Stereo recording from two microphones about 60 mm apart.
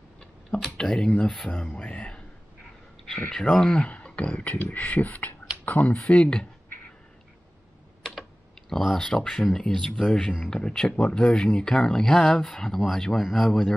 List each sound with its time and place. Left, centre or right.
0.7 s speech: centre
3.3 s speech: centre; by 5.9 s left
6.0 s speech: centre
8.0 s speech: centre